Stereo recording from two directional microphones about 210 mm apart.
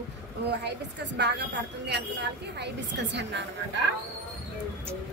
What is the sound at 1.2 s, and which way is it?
A woman's voice, 55° right (ahead or behind).